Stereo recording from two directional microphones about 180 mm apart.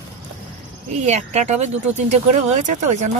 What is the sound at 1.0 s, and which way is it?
Speech, 35° right (ahead or behind).